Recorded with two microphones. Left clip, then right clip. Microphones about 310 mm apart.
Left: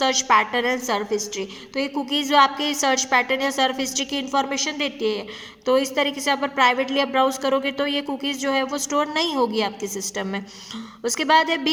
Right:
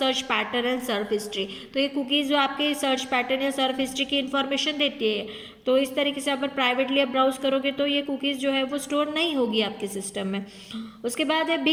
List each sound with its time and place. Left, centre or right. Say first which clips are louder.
0.0 s a woman's voice: left 6 dB; centre